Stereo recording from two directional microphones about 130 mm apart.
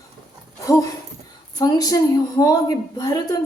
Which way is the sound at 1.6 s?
30° left (ahead or behind).